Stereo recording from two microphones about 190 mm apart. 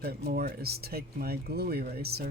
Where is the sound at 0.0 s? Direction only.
55° right (ahead or behind).